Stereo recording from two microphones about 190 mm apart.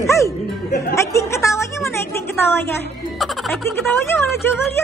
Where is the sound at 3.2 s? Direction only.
Centre (ahead or behind).